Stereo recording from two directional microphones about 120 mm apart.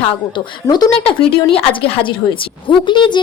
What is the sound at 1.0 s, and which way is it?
A woman's voice, 50° left (ahead or behind).